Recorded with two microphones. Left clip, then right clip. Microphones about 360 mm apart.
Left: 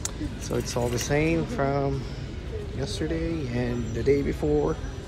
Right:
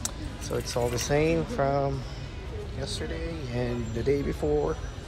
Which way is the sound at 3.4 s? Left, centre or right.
Centre.